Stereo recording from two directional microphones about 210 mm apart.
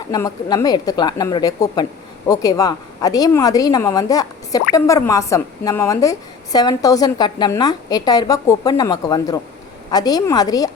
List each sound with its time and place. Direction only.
0.1 s a woman's voice: 15° left (ahead or behind)